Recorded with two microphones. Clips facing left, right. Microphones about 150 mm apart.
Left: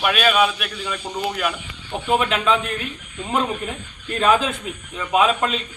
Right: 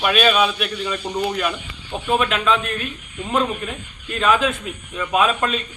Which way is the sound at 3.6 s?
30° left (ahead or behind).